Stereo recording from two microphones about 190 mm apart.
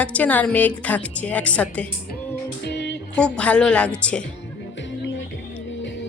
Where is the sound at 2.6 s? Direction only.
65° left (ahead or behind).